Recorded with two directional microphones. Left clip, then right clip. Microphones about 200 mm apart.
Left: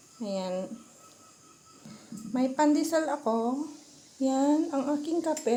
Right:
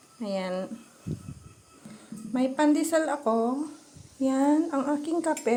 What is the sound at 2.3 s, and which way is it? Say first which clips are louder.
Speech: right 1 dB; 10° right (ahead or behind).